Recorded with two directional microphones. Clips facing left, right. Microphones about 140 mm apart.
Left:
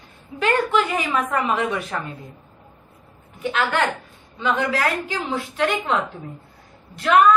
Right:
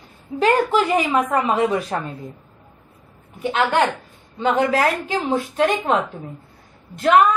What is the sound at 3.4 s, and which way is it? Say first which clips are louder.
Speech: right 3 dB; 20° right (ahead or behind).